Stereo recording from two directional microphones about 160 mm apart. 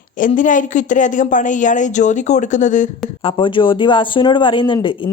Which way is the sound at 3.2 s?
35° left (ahead or behind).